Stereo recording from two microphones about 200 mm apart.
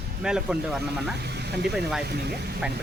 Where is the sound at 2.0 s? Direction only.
55° right (ahead or behind).